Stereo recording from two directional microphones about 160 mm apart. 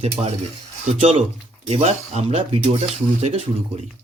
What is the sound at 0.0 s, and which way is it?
Speech, 40° right (ahead or behind).